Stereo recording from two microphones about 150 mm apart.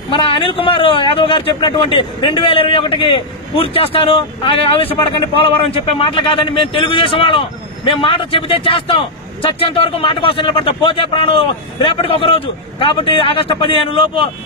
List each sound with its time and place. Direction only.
0.1 s speech: 35° left (ahead or behind)